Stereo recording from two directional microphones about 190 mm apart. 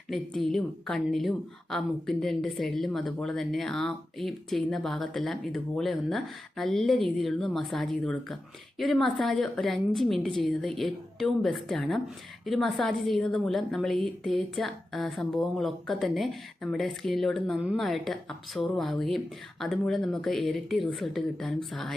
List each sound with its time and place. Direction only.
0.1 s a woman's voice: centre (ahead or behind)